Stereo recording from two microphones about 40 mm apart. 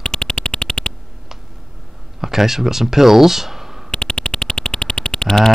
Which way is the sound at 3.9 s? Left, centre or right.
Left.